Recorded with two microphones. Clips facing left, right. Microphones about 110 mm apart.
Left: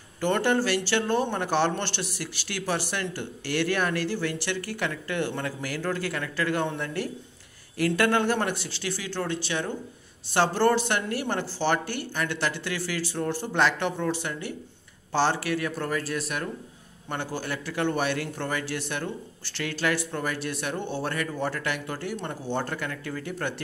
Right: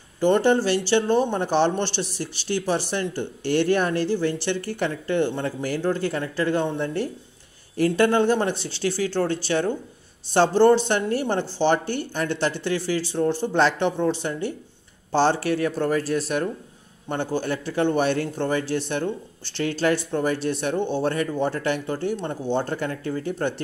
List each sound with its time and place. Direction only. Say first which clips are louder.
0.2 s speech: right 5 dB; 20° right (ahead or behind); by 9.7 s 35° right (ahead or behind)
10.3 s speech: right 6 dB; 25° right (ahead or behind)